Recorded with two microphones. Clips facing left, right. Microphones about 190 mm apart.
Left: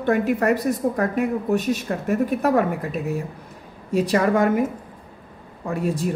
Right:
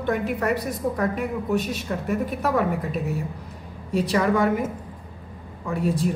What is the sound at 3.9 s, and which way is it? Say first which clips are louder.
Speech: left 2 dB; 45° left (ahead or behind).